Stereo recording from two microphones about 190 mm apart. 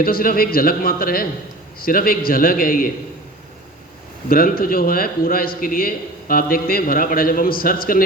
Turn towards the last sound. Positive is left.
turn(degrees=50)  # may be behind; listen again after turning